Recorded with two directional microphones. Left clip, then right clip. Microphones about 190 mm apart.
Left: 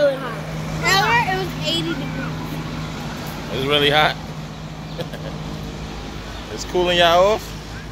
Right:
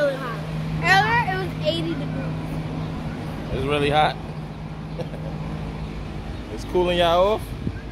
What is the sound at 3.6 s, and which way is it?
Speech, 5° right (ahead or behind).